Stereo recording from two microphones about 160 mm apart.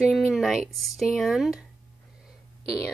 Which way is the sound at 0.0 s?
5° right (ahead or behind).